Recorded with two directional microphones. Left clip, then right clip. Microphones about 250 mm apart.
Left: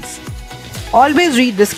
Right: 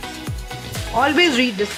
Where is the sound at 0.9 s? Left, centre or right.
Left.